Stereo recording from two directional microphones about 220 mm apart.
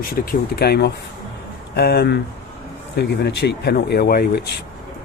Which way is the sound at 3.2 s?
50° left (ahead or behind).